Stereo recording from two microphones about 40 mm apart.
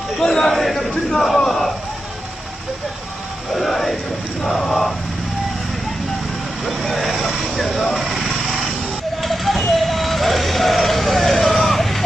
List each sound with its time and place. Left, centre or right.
0.2 s a sound: centre
3.5 s speech: centre
6.7 s vehicle: centre